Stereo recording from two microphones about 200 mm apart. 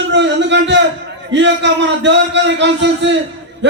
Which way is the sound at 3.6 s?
60° right (ahead or behind).